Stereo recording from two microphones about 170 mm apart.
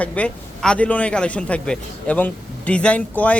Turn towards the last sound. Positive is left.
turn(degrees=10)  # may be behind; listen again after turning